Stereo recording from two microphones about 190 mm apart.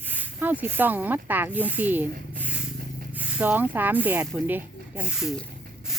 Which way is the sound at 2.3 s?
5° right (ahead or behind).